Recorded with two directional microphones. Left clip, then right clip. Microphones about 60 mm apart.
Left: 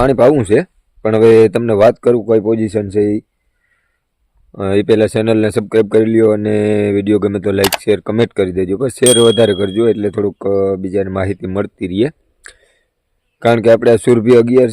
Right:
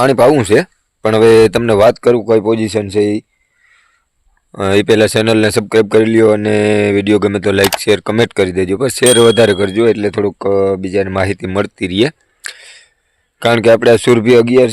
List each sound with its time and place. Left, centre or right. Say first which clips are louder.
0.3 s speech: right 2 dB; centre
2.1 s speech: right 1 dB; left
4.5 s speech: right 2 dB; centre
9.6 s speech: right 2 dB; centre
14.2 s speech: right 1 dB; left